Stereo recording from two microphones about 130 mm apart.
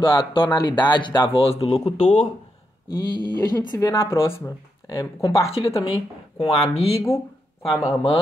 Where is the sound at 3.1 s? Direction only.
35° left (ahead or behind).